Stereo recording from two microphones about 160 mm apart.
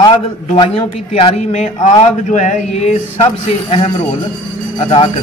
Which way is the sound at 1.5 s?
50° left (ahead or behind).